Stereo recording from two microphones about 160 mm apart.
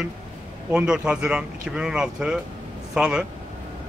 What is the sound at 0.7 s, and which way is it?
Speech, 5° right (ahead or behind).